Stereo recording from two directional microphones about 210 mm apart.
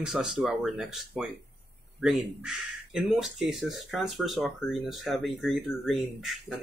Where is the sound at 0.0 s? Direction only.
Centre (ahead or behind).